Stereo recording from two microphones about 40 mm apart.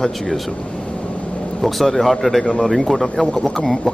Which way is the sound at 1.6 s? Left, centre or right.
Centre.